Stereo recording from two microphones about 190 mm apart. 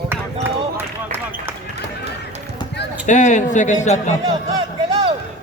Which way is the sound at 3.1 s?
40° left (ahead or behind).